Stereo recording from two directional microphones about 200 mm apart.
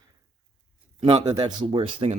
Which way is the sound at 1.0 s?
25° right (ahead or behind).